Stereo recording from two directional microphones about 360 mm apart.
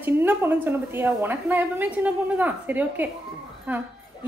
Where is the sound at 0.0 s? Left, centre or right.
Centre.